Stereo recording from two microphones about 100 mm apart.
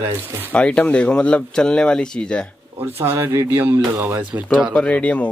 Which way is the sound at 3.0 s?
25° right (ahead or behind).